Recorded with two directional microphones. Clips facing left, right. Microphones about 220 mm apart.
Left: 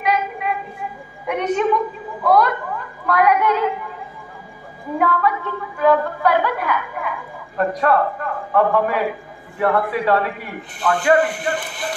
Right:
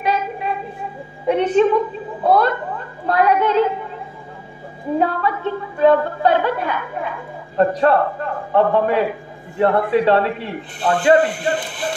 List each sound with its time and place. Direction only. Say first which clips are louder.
0.0 s a sound: even; 30° right (ahead or behind)
1.2 s a woman's voice: right 5 dB; 30° right (ahead or behind)
4.9 s a woman's voice: even; 25° right (ahead or behind)